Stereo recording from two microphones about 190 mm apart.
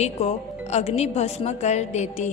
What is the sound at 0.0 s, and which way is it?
A woman's voice, 35° left (ahead or behind).